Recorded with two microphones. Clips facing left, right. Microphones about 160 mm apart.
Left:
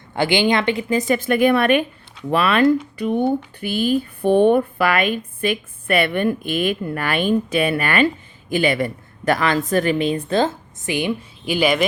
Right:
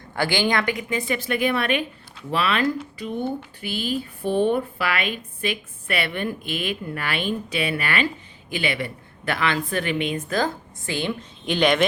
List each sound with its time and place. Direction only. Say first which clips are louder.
0.1 s a woman's voice: left 5 dB; 20° left (ahead or behind); by 11.9 s 5° left (ahead or behind)